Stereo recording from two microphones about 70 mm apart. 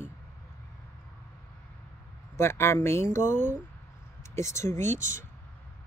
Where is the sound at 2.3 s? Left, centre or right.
Left.